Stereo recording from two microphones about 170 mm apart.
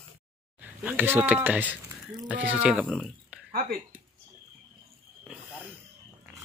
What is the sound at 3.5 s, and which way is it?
Speech, 60° right (ahead or behind).